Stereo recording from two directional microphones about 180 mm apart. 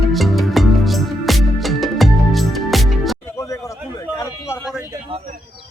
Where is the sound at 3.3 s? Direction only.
15° left (ahead or behind).